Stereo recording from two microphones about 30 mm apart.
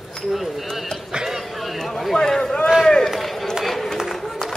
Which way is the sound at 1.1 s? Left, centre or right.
Right.